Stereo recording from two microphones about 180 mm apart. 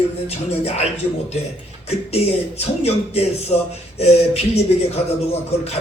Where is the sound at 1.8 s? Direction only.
35° left (ahead or behind).